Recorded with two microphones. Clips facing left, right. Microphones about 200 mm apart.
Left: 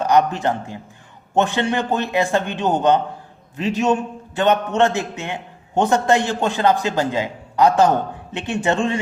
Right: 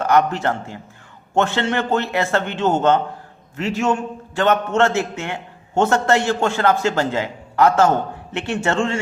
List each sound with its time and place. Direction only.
0.0 s a man's voice: 15° left (ahead or behind)